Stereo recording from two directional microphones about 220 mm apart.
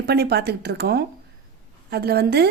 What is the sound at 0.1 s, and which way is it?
A woman's voice, 45° right (ahead or behind).